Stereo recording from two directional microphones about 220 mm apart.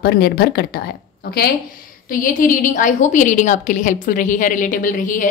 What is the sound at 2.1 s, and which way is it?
A woman's voice, 40° left (ahead or behind).